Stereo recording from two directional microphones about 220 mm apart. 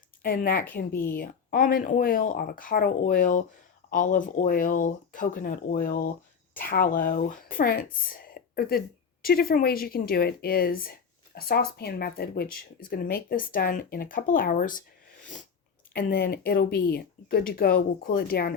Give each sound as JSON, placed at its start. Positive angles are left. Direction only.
{"t": 0.2, "sound": "a woman's voice", "side_deg": 40}
{"t": 8.0, "sound": "a sound", "side_deg": 40}
{"t": 9.2, "sound": "a woman's voice", "side_deg": 40}
{"t": 15.9, "sound": "speech", "side_deg": 45}